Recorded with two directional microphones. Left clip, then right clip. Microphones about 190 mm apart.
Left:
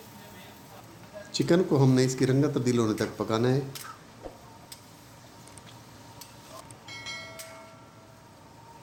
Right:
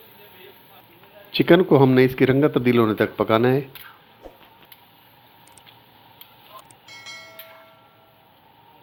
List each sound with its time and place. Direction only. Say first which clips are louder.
1.4 s speech: right 9 dB; 30° right (ahead or behind)
6.8 s train: left 1 dB; centre (ahead or behind)